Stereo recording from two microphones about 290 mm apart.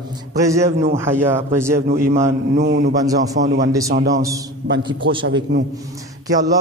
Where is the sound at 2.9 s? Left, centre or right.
Centre.